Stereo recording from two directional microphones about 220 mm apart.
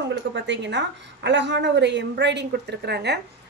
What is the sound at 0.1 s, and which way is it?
A woman's voice, 55° right (ahead or behind).